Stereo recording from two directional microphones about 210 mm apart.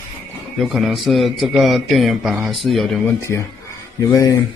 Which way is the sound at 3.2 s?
15° left (ahead or behind).